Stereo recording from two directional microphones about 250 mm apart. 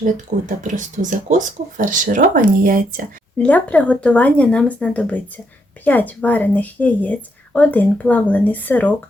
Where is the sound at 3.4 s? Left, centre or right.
Centre.